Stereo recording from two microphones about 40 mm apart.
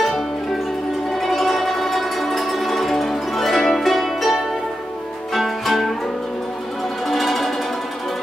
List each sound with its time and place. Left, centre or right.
1.2 s music: centre
7.1 s music: centre